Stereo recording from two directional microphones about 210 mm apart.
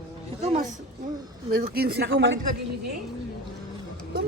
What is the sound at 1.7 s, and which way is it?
Speech, 50° right (ahead or behind).